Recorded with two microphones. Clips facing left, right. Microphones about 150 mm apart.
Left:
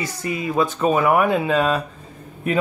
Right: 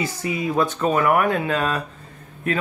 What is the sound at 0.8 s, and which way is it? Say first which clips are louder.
Speech: left 3 dB; 10° left (ahead or behind).